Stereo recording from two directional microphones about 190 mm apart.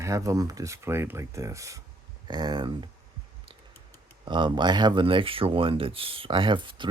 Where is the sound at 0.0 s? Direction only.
15° right (ahead or behind).